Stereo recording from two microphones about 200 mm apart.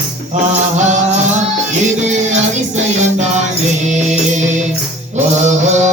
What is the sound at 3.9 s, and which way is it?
Music, 35° right (ahead or behind).